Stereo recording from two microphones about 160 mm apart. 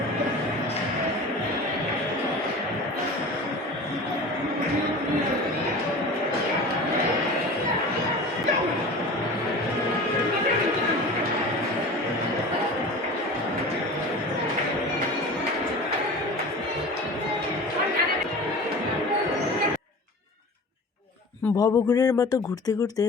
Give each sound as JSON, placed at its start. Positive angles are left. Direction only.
{"t": 21.6, "sound": "speech", "side_deg": 25}